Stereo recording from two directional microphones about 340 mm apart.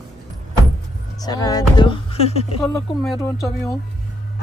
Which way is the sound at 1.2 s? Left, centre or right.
Centre.